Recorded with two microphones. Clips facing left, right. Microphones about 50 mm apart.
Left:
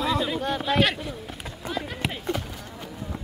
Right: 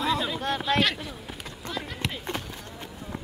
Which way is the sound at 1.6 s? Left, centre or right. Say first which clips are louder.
Left 3 dB; centre.